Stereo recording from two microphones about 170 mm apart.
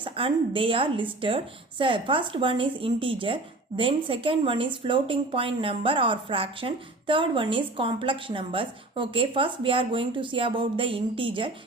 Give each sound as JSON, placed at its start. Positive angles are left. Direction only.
{"t": 0.0, "sound": "speech", "side_deg": -30}